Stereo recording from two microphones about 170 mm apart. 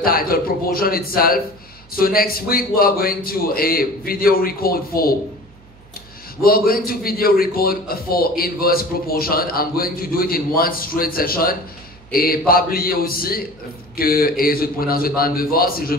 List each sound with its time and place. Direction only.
0.0 s a man's voice: 60° left (ahead or behind)
6.4 s a man's voice: 60° left (ahead or behind)